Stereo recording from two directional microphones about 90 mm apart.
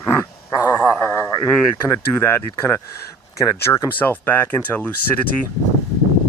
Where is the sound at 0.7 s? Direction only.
20° left (ahead or behind).